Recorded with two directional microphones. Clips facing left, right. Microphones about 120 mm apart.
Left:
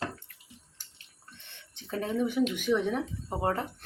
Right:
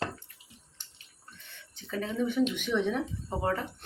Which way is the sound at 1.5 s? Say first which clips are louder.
Left 1 dB; 25° left (ahead or behind).